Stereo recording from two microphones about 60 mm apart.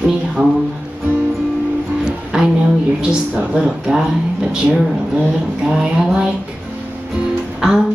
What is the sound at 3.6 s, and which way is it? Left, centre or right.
Speech, centre.